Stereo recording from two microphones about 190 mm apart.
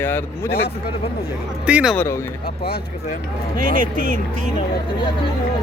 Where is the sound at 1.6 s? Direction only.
5° right (ahead or behind).